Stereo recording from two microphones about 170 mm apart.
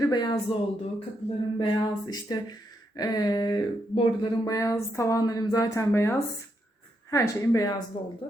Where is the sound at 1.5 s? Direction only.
20° left (ahead or behind).